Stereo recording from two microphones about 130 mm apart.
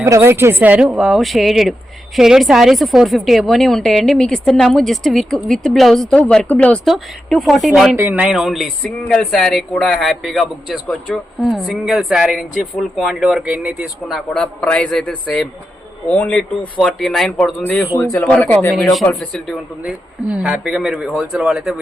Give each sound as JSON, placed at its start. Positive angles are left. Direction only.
{"t": 0.0, "sound": "speech", "side_deg": -20}
{"t": 7.9, "sound": "speech", "side_deg": -20}
{"t": 8.3, "sound": "speech", "side_deg": -5}
{"t": 8.8, "sound": "a man's voice", "side_deg": 5}
{"t": 19.8, "sound": "speech", "side_deg": -10}